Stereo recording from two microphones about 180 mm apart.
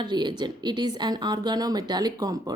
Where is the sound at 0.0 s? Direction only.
25° right (ahead or behind).